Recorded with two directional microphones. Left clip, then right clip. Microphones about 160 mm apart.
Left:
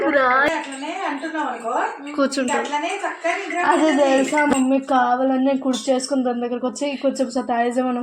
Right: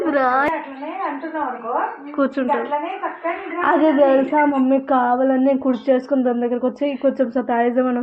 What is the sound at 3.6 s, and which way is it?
Speech, centre (ahead or behind).